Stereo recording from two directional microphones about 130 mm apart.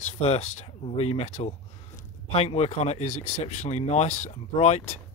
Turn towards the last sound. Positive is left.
turn(degrees=55)  # may be behind; listen again after turning